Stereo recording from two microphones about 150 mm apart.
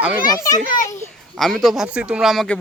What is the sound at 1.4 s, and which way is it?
Speech, 5° left (ahead or behind).